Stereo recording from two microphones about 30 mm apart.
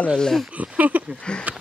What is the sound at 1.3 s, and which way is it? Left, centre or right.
Speech, left.